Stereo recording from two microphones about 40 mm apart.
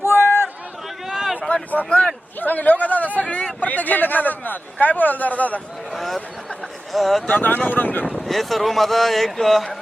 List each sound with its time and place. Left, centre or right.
0.0 s a sound: right
1.0 s a sound: centre
1.8 s speech: left
2.4 s a man's voice: left
3.2 s vehicle: left
3.6 s a man's voice: left
5.9 s a sound: centre
6.9 s speech: centre
7.3 s a man's voice: left
8.2 s speech: centre